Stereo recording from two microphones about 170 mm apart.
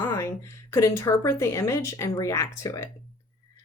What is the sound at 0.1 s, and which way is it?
A woman's voice, 15° left (ahead or behind).